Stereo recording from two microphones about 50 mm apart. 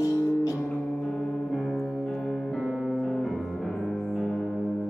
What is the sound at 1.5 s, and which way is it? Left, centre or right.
Music, centre.